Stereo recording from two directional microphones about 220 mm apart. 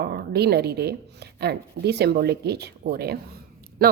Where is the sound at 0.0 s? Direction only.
45° right (ahead or behind).